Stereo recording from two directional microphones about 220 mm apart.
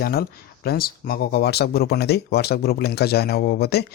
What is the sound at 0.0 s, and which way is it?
Speech, 45° left (ahead or behind).